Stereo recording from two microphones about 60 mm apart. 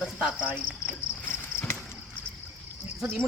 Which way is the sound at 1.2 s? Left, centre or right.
Left.